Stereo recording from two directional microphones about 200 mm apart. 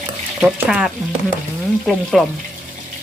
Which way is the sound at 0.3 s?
5° right (ahead or behind).